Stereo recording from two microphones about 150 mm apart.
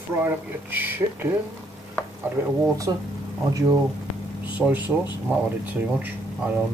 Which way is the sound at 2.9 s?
25° right (ahead or behind).